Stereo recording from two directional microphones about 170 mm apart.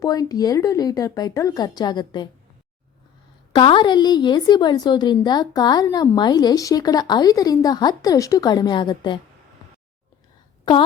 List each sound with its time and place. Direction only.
0.0 s a woman's voice: 20° left (ahead or behind)
3.5 s a woman's voice: 30° left (ahead or behind)
10.7 s a woman's voice: 25° left (ahead or behind)